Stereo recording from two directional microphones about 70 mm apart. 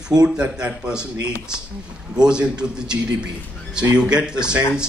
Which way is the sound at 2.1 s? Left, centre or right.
Centre.